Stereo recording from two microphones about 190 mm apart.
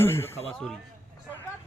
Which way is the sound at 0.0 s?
15° left (ahead or behind).